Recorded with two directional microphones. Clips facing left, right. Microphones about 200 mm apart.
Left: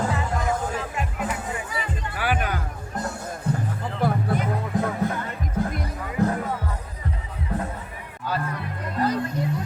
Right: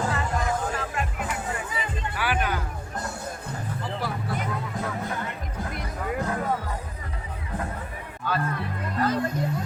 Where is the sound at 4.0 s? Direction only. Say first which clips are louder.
Left 11 dB; 50° left (ahead or behind).